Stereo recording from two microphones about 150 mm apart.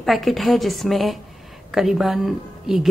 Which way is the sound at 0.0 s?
Centre (ahead or behind).